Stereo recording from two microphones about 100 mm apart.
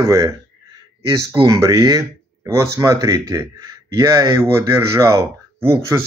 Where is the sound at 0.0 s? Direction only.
30° right (ahead or behind).